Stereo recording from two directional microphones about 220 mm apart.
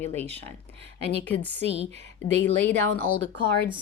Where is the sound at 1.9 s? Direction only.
30° right (ahead or behind).